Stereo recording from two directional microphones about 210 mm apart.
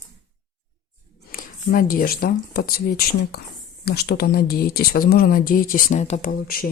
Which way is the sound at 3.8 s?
50° left (ahead or behind).